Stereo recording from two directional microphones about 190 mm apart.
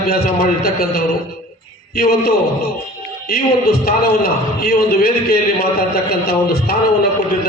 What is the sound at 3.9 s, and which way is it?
A man's voice, 50° left (ahead or behind).